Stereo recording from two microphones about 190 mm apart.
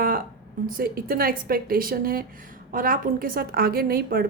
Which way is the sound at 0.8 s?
50° right (ahead or behind).